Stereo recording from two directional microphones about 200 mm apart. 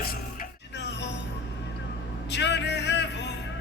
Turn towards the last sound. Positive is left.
turn(degrees=60)  # may be behind; listen again after turning